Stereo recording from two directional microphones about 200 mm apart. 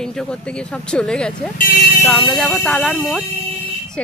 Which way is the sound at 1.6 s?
55° left (ahead or behind).